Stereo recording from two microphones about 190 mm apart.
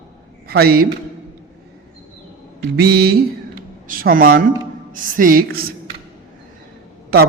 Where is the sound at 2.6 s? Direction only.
60° right (ahead or behind).